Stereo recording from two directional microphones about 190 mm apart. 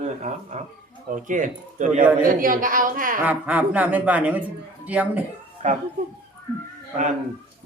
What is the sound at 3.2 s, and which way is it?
A man's voice, 5° right (ahead or behind).